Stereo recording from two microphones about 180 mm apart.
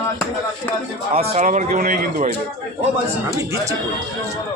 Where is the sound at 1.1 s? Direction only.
35° right (ahead or behind).